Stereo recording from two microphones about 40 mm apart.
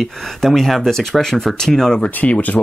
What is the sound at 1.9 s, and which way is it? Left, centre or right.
Speech, left.